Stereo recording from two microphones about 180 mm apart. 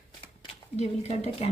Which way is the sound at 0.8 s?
35° left (ahead or behind).